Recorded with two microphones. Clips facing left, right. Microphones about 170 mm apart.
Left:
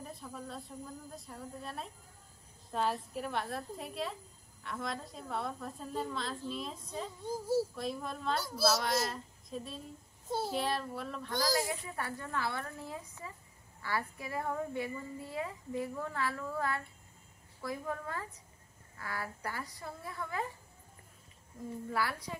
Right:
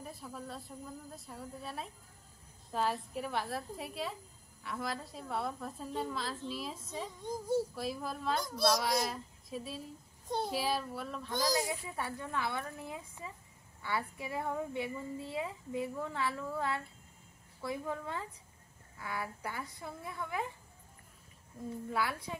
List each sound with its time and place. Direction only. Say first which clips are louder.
0.0 s a woman's voice: even; centre (ahead or behind)
7.2 s child singing: left 1 dB; 5° left (ahead or behind)
7.7 s a woman's voice: even; 5° right (ahead or behind)
11.3 s a child's voice: even; 20° right (ahead or behind)